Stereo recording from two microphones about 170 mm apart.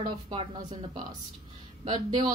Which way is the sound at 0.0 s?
35° right (ahead or behind).